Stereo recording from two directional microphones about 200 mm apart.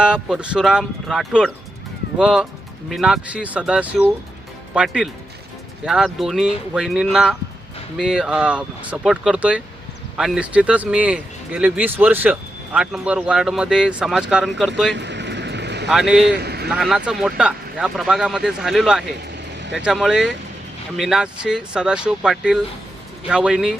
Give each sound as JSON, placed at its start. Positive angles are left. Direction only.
{"t": 0.0, "sound": "speech", "side_deg": -5}
{"t": 14.9, "sound": "vehicle", "side_deg": -60}
{"t": 15.9, "sound": "speech", "side_deg": 0}
{"t": 16.4, "sound": "vehicle", "side_deg": -55}
{"t": 16.6, "sound": "speech", "side_deg": 0}